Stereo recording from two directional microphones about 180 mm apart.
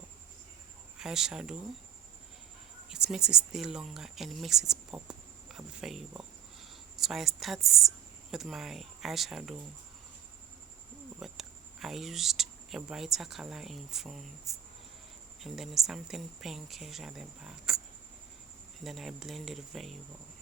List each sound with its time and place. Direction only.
0.9 s speech: centre (ahead or behind)
2.9 s speech: 5° right (ahead or behind)
11.2 s speech: centre (ahead or behind)
18.8 s speech: centre (ahead or behind)